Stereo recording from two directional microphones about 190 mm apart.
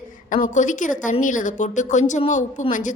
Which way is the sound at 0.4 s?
40° left (ahead or behind).